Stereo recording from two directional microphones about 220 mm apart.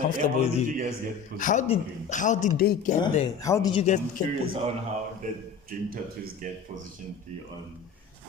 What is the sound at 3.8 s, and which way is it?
Speech, 35° left (ahead or behind).